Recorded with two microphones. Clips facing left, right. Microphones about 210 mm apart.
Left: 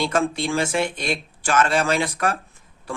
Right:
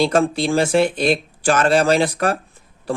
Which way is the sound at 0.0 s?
35° right (ahead or behind).